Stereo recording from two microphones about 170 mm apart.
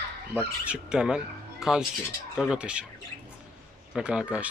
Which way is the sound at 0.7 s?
5° right (ahead or behind).